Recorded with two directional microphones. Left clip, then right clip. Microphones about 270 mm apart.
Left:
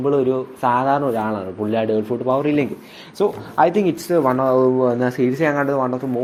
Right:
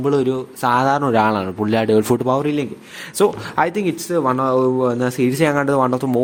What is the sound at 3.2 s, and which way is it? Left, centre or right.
Speech, right.